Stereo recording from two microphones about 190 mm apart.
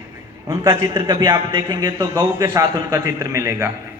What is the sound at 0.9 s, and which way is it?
A man's voice, 25° right (ahead or behind).